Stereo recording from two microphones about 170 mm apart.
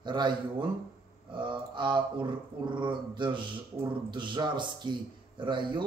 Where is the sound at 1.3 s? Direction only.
30° right (ahead or behind).